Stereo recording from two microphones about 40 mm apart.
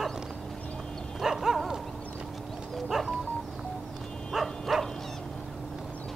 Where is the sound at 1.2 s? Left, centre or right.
Centre.